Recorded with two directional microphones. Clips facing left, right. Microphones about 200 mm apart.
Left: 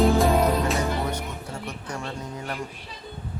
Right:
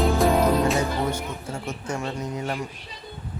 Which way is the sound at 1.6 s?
25° right (ahead or behind).